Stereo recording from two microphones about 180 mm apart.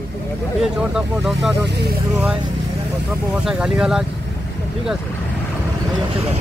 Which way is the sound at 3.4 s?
5° right (ahead or behind).